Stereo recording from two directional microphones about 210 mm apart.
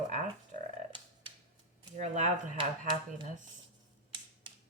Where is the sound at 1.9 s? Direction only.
35° right (ahead or behind).